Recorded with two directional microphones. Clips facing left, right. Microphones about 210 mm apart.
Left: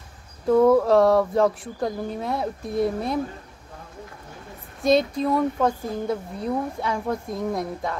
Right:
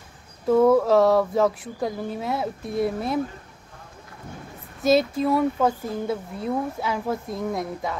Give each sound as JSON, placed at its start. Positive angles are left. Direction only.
{"t": 0.5, "sound": "speech", "side_deg": 0}
{"t": 4.8, "sound": "speech", "side_deg": -5}